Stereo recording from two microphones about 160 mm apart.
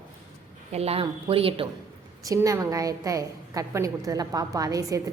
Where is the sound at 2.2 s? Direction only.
20° right (ahead or behind).